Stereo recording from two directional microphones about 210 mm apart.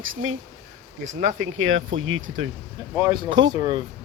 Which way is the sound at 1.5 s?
70° right (ahead or behind).